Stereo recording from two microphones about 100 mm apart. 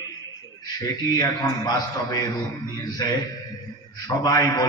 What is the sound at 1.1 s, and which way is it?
A man's voice, 40° left (ahead or behind).